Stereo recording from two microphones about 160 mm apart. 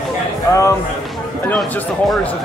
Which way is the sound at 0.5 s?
20° left (ahead or behind).